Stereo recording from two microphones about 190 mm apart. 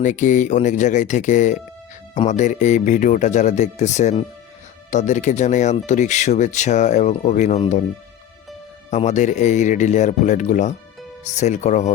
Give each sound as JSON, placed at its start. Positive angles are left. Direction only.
{"t": 0.0, "sound": "speech", "side_deg": 40}
{"t": 8.9, "sound": "speech", "side_deg": 40}